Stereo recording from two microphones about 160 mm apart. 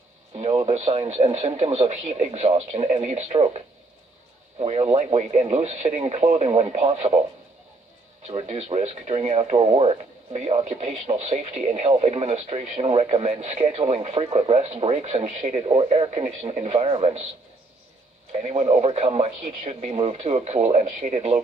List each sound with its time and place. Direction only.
0.5 s radio: 30° right (ahead or behind)
0.7 s speech: 45° right (ahead or behind)
8.3 s speech: 40° right (ahead or behind)
18.4 s speech: 45° right (ahead or behind)